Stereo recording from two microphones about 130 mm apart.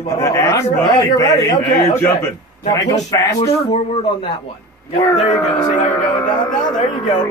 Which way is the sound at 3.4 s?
50° left (ahead or behind).